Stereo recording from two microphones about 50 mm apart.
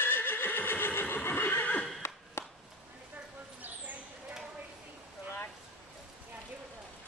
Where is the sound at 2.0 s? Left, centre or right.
Left.